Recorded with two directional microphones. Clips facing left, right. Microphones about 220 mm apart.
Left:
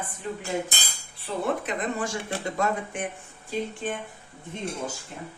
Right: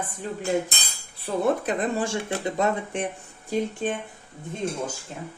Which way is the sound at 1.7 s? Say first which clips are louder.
Right 4 dB; 30° right (ahead or behind).